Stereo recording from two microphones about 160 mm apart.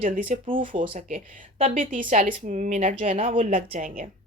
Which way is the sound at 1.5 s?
35° right (ahead or behind).